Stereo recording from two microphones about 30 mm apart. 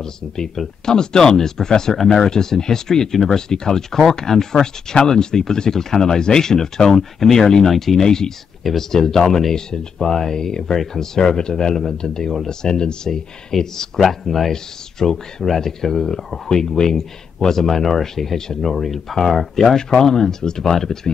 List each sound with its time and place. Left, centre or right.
0.8 s speech: left
14.0 s speech: centre
14.5 s speech: centre